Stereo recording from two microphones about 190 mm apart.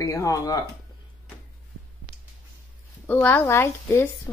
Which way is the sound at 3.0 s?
10° left (ahead or behind).